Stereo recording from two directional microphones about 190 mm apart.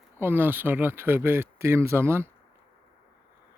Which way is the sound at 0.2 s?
10° right (ahead or behind).